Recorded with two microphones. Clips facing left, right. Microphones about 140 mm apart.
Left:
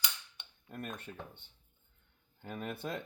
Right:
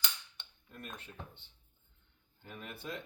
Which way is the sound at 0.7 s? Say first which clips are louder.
Left 5 dB; 50° left (ahead or behind).